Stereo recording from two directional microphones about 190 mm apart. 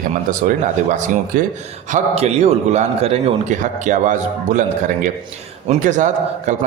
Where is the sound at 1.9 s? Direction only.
35° right (ahead or behind).